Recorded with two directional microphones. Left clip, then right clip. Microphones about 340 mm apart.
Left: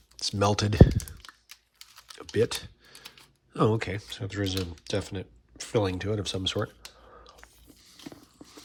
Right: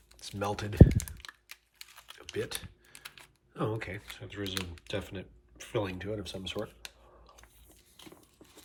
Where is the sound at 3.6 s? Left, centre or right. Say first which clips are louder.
Left 9 dB; centre.